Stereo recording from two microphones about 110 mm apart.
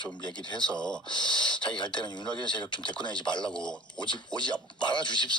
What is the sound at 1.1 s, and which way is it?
Speech, 45° left (ahead or behind).